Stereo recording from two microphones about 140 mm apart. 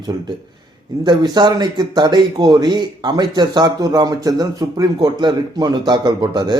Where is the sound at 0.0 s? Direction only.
30° right (ahead or behind).